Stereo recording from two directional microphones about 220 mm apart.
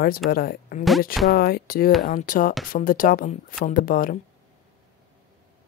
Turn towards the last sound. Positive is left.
turn(degrees=40)  # may be behind; listen again after turning